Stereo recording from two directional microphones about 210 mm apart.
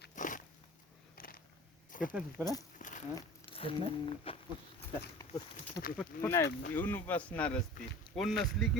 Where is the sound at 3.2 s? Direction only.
25° left (ahead or behind).